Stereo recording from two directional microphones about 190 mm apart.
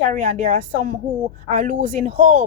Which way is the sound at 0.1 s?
40° right (ahead or behind).